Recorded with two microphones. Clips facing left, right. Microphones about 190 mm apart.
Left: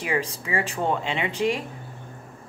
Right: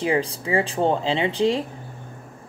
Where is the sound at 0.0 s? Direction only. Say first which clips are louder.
Right 5 dB; 30° right (ahead or behind).